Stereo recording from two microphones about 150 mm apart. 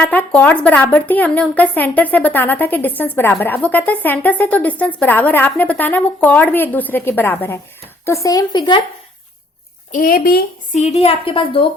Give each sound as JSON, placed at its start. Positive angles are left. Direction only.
{"t": 0.0, "sound": "a woman's voice", "side_deg": 10}
{"t": 9.9, "sound": "speech", "side_deg": 75}
{"t": 10.8, "sound": "a woman's voice", "side_deg": 45}